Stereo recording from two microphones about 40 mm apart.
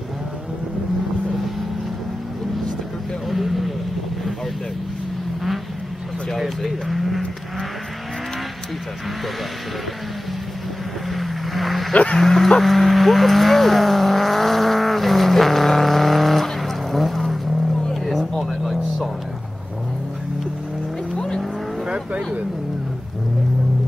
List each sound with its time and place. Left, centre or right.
3.3 s vehicle: centre
6.3 s vehicle: centre
11.1 s vehicle: centre
11.9 s bow-wow: left
12.2 s livestock: centre
18.3 s vehicle: centre
21.8 s vehicle: right